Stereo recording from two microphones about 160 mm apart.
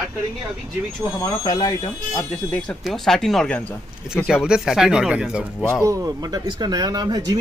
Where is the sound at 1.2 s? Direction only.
20° left (ahead or behind).